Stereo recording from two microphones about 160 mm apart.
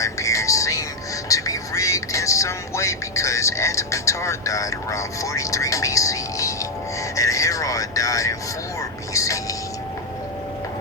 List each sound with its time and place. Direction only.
0.0 s speech: 20° left (ahead or behind)